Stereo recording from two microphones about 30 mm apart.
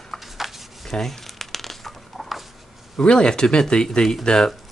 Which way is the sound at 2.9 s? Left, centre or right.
Left.